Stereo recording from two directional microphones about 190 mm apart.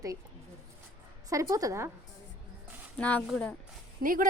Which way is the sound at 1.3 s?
15° right (ahead or behind).